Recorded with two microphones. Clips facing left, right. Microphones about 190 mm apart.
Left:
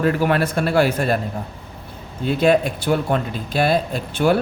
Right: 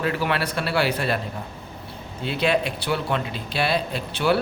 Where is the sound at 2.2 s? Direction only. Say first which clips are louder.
Left 6 dB; 45° left (ahead or behind).